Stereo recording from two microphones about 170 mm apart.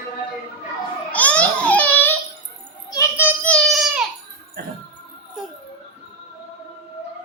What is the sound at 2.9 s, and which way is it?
Child singing, 20° left (ahead or behind).